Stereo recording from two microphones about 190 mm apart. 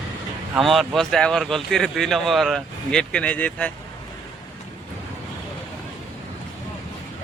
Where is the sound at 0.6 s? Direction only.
Centre (ahead or behind).